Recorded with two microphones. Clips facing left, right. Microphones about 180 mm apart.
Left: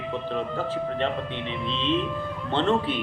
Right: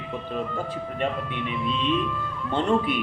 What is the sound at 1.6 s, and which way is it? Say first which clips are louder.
Speech: even; 25° left (ahead or behind).